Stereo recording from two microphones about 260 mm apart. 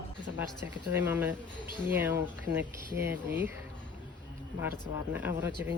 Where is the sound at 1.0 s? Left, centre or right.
Centre.